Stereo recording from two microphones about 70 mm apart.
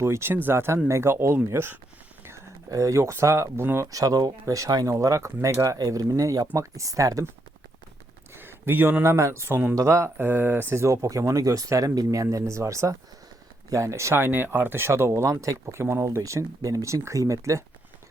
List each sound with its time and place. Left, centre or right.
0.0 s speech: right
2.6 s speech: right
3.9 s speech: right
5.7 s speech: right
8.4 s speech: right
9.7 s speech: right
10.2 s speech: right